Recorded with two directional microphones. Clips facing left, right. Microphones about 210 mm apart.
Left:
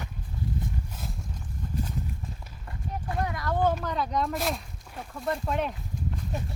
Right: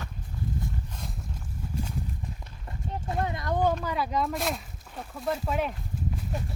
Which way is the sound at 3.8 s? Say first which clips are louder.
Even; 5° right (ahead or behind).